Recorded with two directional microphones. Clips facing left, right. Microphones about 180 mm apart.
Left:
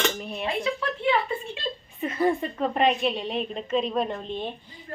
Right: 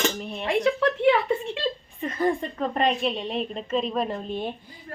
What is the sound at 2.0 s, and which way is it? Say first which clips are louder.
A woman's voice: left 2 dB; 5° left (ahead or behind).